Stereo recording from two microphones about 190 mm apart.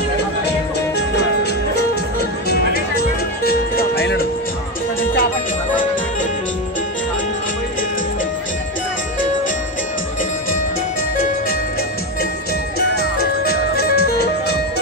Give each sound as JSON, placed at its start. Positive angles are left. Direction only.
{"t": 0.9, "sound": "music", "side_deg": 60}
{"t": 2.7, "sound": "music", "side_deg": 55}
{"t": 12.7, "sound": "music", "side_deg": 55}